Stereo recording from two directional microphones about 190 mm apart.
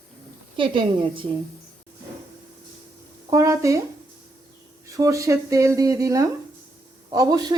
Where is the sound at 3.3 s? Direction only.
15° right (ahead or behind).